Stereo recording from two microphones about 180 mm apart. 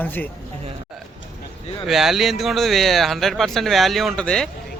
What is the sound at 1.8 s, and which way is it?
Speech, centre (ahead or behind).